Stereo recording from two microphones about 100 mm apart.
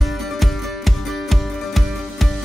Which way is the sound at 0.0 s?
Centre (ahead or behind).